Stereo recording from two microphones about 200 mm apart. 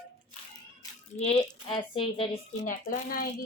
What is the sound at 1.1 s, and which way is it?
Speech, 30° left (ahead or behind).